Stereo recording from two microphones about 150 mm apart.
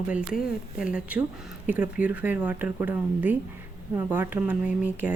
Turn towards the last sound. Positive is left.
turn(degrees=-10)  # may be behind; listen again after turning